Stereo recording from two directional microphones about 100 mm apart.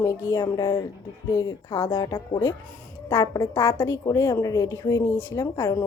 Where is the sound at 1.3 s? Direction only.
35° left (ahead or behind).